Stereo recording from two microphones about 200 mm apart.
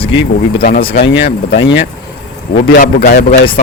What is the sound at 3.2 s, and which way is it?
Speech, 35° left (ahead or behind).